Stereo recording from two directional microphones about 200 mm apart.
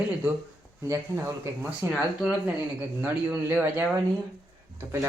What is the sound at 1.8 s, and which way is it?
Speech, 10° right (ahead or behind).